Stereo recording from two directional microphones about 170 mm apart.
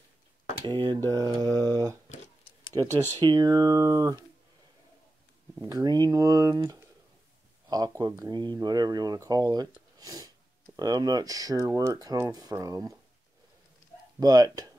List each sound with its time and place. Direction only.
0.7 s speech: 25° right (ahead or behind)
2.8 s speech: 15° left (ahead or behind)
3.2 s speech: 25° right (ahead or behind)
5.6 s speech: 20° right (ahead or behind)
14.2 s speech: 25° right (ahead or behind)